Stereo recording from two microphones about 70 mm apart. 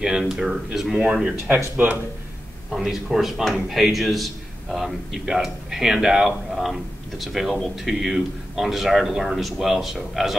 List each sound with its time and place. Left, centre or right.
0.0 s speech: centre
1.8 s speech: right
2.7 s a man's voice: centre